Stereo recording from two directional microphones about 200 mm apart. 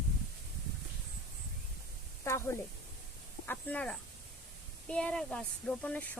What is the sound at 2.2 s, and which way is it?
Speech, 15° left (ahead or behind).